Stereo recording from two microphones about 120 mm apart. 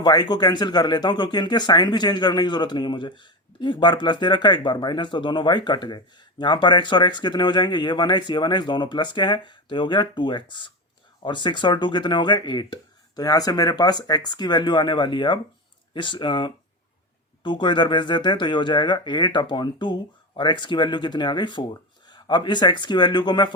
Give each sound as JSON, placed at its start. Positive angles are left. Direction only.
{"t": 0.0, "sound": "speech", "side_deg": 35}